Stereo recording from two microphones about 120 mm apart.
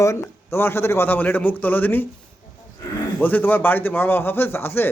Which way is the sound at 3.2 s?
15° left (ahead or behind).